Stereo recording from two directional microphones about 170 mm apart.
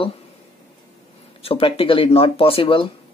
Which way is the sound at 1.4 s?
35° left (ahead or behind).